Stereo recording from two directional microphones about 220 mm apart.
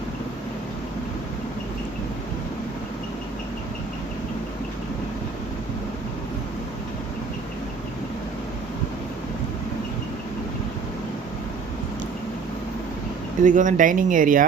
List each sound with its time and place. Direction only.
13.4 s speech: 35° right (ahead or behind)